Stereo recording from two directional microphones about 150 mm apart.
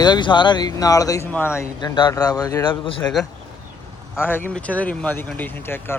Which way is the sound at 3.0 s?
10° left (ahead or behind).